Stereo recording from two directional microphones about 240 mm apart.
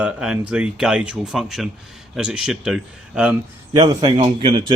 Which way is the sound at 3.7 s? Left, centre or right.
Centre.